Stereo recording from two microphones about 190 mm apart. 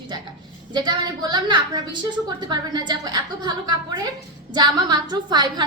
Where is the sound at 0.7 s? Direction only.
25° right (ahead or behind).